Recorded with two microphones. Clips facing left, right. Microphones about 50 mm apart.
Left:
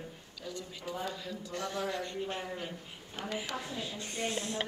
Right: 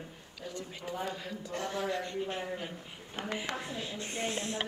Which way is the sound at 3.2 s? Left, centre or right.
Right.